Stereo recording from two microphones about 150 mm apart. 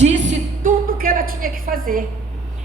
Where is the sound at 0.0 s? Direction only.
50° right (ahead or behind); by 2.0 s 70° right (ahead or behind).